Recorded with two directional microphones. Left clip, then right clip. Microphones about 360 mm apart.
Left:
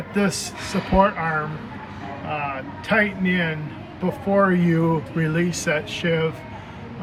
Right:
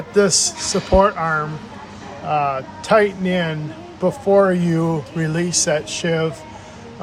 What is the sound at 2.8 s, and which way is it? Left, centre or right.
A man's voice, centre.